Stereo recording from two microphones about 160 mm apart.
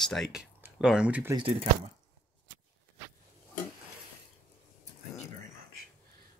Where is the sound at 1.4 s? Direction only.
40° right (ahead or behind).